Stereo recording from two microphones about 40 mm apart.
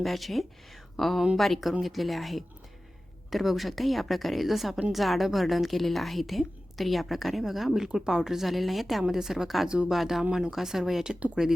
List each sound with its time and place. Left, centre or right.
0.0 s a woman's voice: centre
9.6 s speech: right
9.9 s a woman's voice: centre